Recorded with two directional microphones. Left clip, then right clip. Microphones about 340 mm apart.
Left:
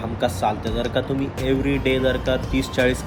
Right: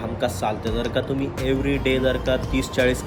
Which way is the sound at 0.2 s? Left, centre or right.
Centre.